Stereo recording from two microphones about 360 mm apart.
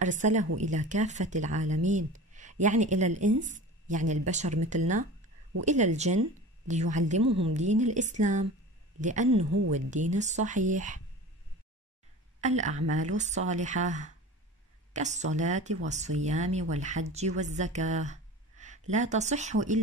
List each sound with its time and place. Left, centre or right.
0.0 s speech: centre
12.4 s speech: centre